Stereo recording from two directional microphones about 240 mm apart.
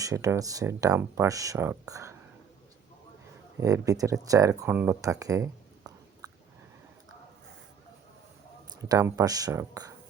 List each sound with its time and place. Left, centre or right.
0.0 s speech: centre
3.6 s speech: centre
6.2 s a sound: centre
8.8 s speech: centre